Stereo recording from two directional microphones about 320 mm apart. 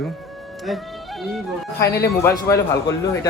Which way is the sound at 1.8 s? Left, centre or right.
Left.